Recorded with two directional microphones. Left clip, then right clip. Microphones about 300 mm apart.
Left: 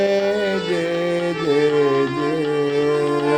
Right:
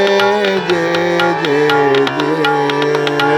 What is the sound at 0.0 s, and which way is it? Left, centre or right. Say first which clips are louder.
Music: right 6 dB; centre.